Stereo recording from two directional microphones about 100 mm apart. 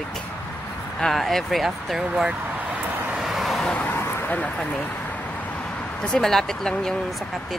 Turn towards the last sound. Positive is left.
turn(degrees=5)  # may be behind; listen again after turning